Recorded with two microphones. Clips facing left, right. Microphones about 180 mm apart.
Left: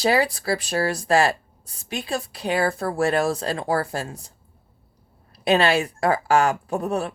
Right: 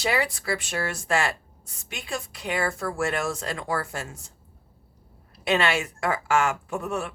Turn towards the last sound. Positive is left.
turn(degrees=35)  # may be behind; listen again after turning